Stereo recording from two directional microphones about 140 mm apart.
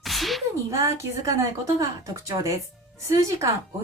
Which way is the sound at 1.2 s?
25° right (ahead or behind).